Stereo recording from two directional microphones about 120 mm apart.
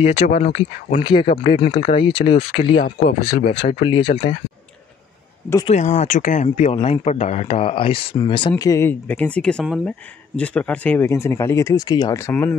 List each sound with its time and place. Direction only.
0.0 s speech: 60° left (ahead or behind)
0.9 s speech: 45° left (ahead or behind)
1.8 s speech: 55° left (ahead or behind)
5.7 s speech: 80° left; by 8.8 s 30° left (ahead or behind)
8.8 s speech: 15° left (ahead or behind)
11.1 s speech: 25° left (ahead or behind)